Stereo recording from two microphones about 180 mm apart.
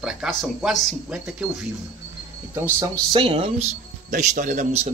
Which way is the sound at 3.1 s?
30° right (ahead or behind).